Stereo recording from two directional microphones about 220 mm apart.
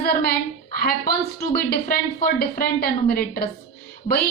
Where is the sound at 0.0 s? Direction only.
45° left (ahead or behind).